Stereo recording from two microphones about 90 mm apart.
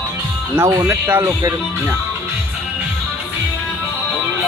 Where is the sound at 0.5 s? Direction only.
30° right (ahead or behind).